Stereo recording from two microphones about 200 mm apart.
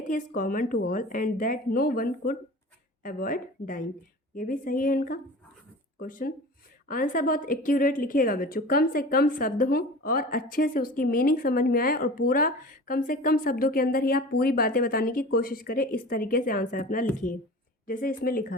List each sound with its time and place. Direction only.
0.1 s a woman's voice: 40° left (ahead or behind)